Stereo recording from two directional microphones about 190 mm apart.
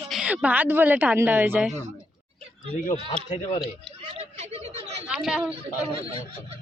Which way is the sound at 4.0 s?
30° right (ahead or behind).